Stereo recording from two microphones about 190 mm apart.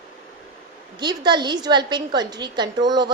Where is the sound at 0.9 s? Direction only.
25° right (ahead or behind).